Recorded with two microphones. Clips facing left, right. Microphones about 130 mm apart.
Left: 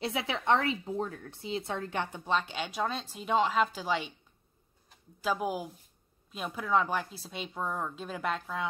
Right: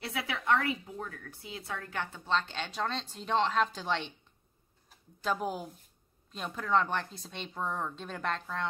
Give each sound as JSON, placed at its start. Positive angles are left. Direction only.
{"t": 0.0, "sound": "a woman's voice", "side_deg": 25}